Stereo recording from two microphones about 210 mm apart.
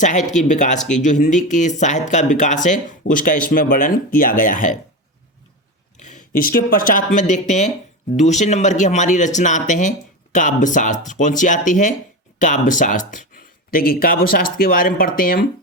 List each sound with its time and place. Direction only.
0.0 s a man's voice: 35° left (ahead or behind)
6.0 s speech: 35° left (ahead or behind)